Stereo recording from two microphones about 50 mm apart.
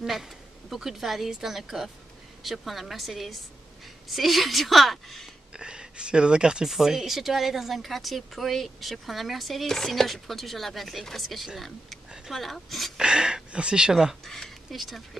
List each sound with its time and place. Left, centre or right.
0.0 s speech: centre
5.6 s speech: centre
6.7 s speech: centre
12.9 s speech: centre
14.2 s speech: centre